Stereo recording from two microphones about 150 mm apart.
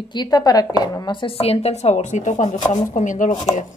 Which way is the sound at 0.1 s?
25° left (ahead or behind).